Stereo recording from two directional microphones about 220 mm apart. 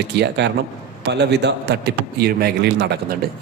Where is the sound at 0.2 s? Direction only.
50° right (ahead or behind).